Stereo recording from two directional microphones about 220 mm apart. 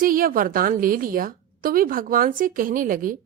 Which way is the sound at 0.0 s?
40° right (ahead or behind).